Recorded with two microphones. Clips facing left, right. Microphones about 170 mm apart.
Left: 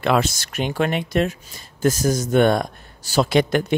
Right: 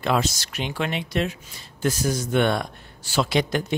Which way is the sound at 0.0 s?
65° left (ahead or behind).